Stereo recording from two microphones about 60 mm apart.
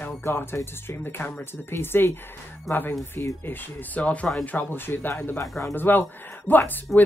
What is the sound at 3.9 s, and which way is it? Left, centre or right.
Speech, left.